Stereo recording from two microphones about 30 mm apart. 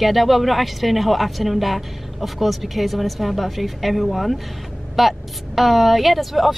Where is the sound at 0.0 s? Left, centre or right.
Centre.